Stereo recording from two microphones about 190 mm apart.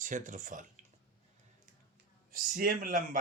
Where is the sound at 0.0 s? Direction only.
45° right (ahead or behind).